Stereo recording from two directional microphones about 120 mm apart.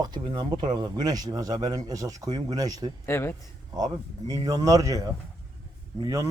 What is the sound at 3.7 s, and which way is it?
A man's voice, 35° right (ahead or behind).